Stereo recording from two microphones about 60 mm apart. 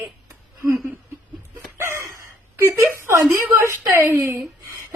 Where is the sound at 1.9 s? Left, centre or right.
Right.